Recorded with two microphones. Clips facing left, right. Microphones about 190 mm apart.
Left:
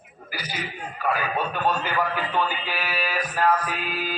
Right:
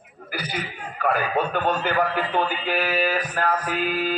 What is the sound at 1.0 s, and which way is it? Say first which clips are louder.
A man's voice: right 3 dB; 55° right (ahead or behind).